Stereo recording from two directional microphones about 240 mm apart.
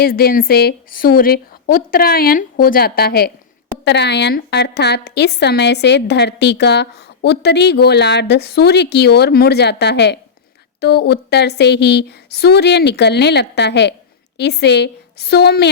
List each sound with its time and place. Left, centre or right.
0.0 s a woman's voice: left